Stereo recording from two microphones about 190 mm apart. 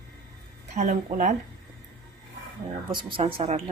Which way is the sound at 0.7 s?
40° right (ahead or behind).